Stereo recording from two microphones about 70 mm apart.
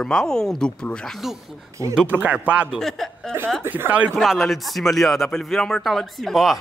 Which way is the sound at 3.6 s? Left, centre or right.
Right.